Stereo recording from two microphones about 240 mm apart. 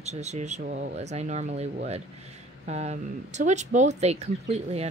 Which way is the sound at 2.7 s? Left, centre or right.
Right.